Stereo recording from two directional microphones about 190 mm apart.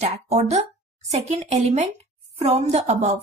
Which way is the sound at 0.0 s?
35° right (ahead or behind).